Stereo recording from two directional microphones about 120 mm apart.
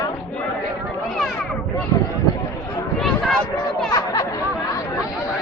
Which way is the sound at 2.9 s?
Centre (ahead or behind).